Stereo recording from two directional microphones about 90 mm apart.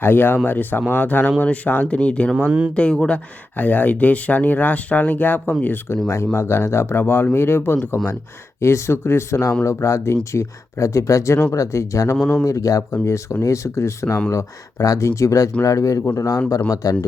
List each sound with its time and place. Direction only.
0.0 s speech: 20° left (ahead or behind)
2.5 s speech: 15° right (ahead or behind)
2.7 s speech: 10° left (ahead or behind); by 12.1 s 35° left (ahead or behind)
12.1 s speech: 5° left (ahead or behind)
12.5 s speech: 40° left (ahead or behind)